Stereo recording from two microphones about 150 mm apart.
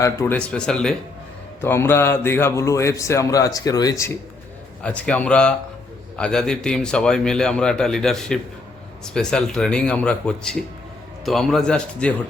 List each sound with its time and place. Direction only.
0.0 s a man's voice: 20° left (ahead or behind)
0.3 s a man's voice: 5° left (ahead or behind)
1.6 s a man's voice: 15° left (ahead or behind)
4.8 s a man's voice: 5° left (ahead or behind)